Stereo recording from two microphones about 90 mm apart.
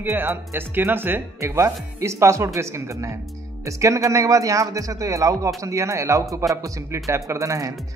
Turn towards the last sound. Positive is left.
turn(degrees=-35)  # may be behind; listen again after turning